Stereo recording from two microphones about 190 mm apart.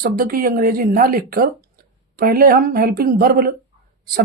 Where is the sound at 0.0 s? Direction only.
50° right (ahead or behind).